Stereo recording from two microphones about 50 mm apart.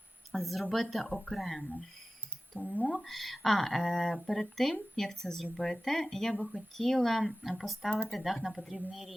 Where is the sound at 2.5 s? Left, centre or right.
Right.